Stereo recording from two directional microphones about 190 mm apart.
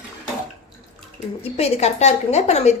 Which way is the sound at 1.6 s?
35° left (ahead or behind).